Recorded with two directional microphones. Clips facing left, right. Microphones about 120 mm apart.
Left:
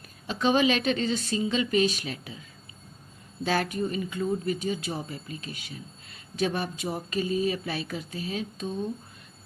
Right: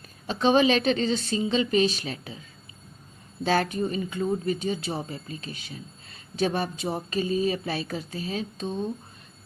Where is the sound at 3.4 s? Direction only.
30° right (ahead or behind).